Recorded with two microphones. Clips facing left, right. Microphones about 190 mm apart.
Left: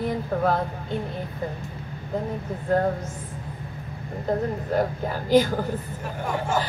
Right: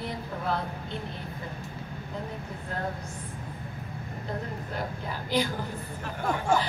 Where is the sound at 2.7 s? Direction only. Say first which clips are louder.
Left 14 dB; 45° left (ahead or behind).